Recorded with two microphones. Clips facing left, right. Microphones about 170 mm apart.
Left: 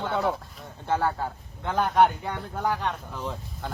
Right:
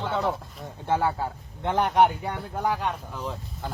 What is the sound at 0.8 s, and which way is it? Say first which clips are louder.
Speech: right 1 dB; 10° right (ahead or behind).